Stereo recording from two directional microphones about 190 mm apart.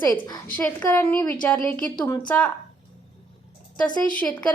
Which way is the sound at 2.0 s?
15° left (ahead or behind).